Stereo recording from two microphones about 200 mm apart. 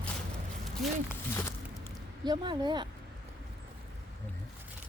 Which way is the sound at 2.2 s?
20° right (ahead or behind).